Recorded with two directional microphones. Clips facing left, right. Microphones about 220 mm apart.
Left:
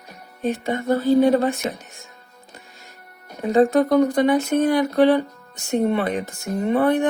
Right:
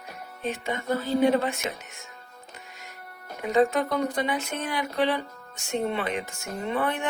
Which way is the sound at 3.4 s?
35° left (ahead or behind).